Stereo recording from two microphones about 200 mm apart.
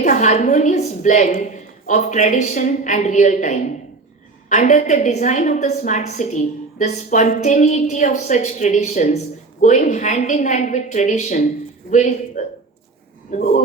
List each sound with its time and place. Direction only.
0.0 s a woman's voice: 35° left (ahead or behind)